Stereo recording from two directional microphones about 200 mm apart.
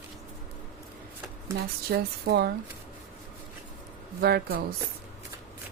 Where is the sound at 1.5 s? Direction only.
50° right (ahead or behind).